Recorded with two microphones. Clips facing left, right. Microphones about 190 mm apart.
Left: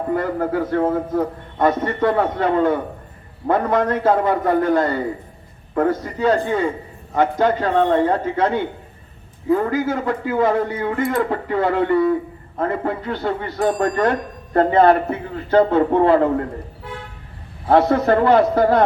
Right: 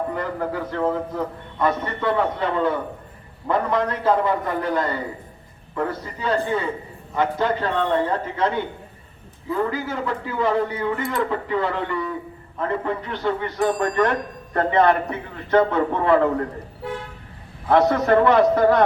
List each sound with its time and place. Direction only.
0.1 s a man's voice: 45° left (ahead or behind)
9.5 s a man's voice: 45° left (ahead or behind)
17.7 s a man's voice: 30° left (ahead or behind)